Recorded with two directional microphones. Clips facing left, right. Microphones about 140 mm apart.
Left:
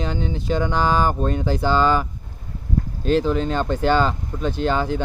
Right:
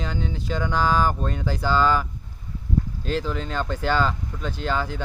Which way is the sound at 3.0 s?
20° left (ahead or behind).